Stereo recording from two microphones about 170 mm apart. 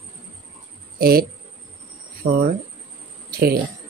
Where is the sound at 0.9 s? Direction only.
65° right (ahead or behind).